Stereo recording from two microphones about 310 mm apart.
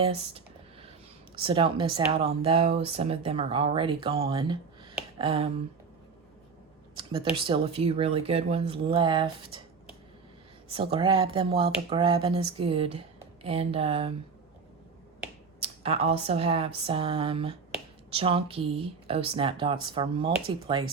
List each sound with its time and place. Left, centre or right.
0.0 s a sound: centre
1.4 s speech: centre
6.9 s a sound: centre
7.3 s speech: centre
10.7 s speech: centre
15.6 s speech: centre